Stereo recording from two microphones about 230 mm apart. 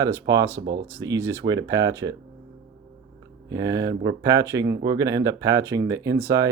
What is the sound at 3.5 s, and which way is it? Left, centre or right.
Speech, centre.